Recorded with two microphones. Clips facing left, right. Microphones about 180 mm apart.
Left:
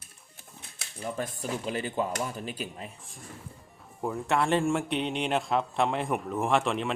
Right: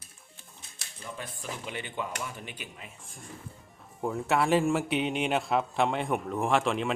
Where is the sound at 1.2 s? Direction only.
40° left (ahead or behind).